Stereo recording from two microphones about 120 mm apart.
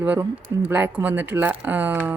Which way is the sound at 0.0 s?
15° right (ahead or behind).